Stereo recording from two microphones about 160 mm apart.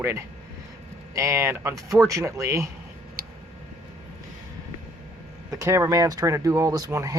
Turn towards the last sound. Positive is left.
turn(degrees=-20)  # may be behind; listen again after turning